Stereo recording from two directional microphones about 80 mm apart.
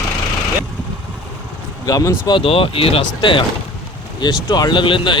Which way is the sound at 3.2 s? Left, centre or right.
Left.